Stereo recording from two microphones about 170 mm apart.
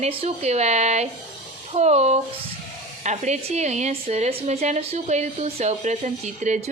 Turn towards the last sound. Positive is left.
turn(degrees=-45)  # may be behind; listen again after turning